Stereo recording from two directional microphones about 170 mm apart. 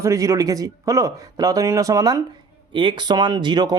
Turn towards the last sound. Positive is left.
turn(degrees=-25)  # may be behind; listen again after turning